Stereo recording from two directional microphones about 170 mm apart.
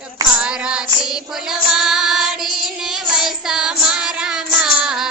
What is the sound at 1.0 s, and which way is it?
Child singing, 5° right (ahead or behind).